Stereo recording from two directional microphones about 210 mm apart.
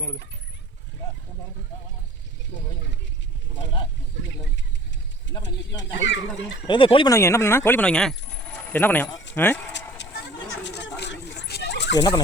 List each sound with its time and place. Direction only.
5.4 s speech: 60° left (ahead or behind)
6.7 s speech: 25° left (ahead or behind)
10.0 s a sound: 55° left (ahead or behind)
10.6 s dog: 55° left (ahead or behind)